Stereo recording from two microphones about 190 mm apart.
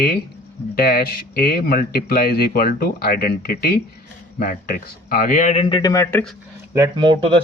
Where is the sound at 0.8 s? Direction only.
50° left (ahead or behind).